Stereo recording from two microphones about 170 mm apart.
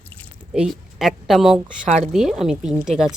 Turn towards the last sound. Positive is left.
turn(degrees=-5)  # may be behind; listen again after turning